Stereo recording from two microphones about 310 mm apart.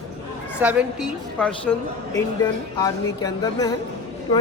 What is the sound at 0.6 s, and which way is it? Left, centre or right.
A woman's voice, centre.